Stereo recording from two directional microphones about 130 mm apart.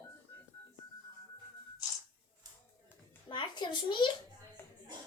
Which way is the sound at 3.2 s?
35° left (ahead or behind).